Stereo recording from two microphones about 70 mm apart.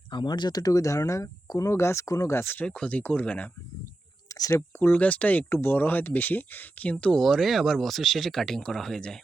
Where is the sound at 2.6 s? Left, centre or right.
Centre.